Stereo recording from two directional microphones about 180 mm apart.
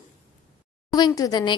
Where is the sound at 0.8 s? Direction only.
20° left (ahead or behind).